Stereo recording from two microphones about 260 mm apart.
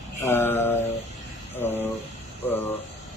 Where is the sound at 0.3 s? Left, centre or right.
Centre.